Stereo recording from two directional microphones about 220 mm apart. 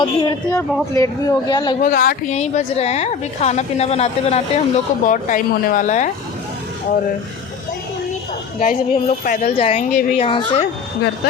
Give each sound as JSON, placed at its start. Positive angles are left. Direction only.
{"t": 0.0, "sound": "a woman's voice", "side_deg": 20}
{"t": 1.8, "sound": "a woman's voice", "side_deg": 40}
{"t": 8.5, "sound": "speech", "side_deg": 40}